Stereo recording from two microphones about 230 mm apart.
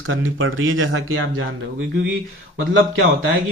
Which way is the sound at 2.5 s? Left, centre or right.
Right.